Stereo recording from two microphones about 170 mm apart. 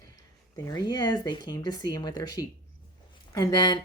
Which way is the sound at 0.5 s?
20° left (ahead or behind).